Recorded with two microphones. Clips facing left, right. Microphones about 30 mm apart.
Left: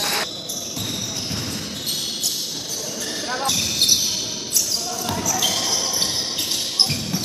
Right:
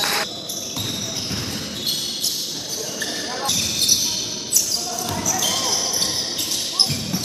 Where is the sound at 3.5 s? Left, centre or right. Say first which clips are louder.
Left 1 dB; centre.